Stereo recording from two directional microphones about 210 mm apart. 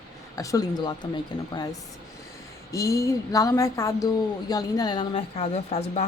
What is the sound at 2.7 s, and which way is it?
A woman's voice, 15° left (ahead or behind).